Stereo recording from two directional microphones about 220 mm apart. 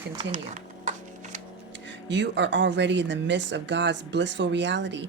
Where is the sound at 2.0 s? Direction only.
55° right (ahead or behind).